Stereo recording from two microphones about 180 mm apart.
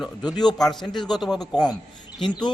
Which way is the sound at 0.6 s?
Centre (ahead or behind).